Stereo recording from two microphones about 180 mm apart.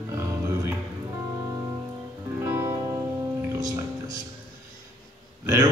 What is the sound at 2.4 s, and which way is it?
Music, 15° right (ahead or behind).